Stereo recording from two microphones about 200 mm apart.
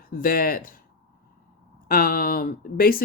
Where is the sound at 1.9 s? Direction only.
45° left (ahead or behind).